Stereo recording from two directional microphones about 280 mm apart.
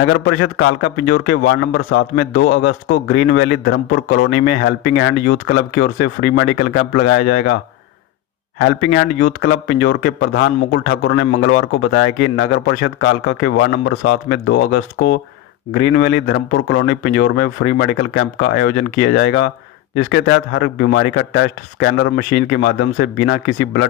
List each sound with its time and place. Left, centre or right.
0.0 s a man's voice: left
8.5 s a man's voice: left